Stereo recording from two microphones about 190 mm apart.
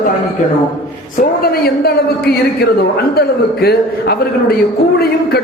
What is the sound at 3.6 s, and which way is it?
Speech, 55° left (ahead or behind).